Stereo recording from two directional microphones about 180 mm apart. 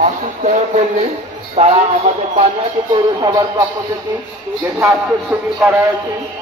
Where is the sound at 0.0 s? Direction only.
40° right (ahead or behind).